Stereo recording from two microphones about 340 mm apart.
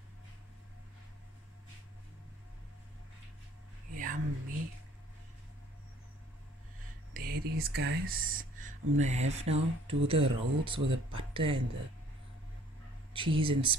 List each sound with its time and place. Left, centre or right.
3.9 s a sound: right
7.2 s speech: right
13.1 s speech: centre